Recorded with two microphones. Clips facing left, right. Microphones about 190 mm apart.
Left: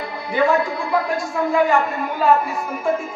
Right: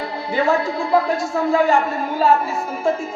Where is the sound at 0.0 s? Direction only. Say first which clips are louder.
Even; 25° right (ahead or behind).